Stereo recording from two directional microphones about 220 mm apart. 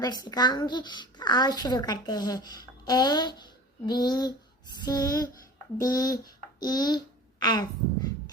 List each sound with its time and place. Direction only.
0.0 s speech: 15° left (ahead or behind)
4.8 s a sound: 15° left (ahead or behind)
6.6 s a child's voice: 20° left (ahead or behind)